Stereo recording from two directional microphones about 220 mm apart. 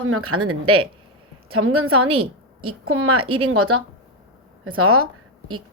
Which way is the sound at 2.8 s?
75° right (ahead or behind).